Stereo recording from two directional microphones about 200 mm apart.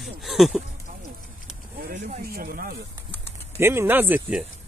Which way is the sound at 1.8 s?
45° right (ahead or behind).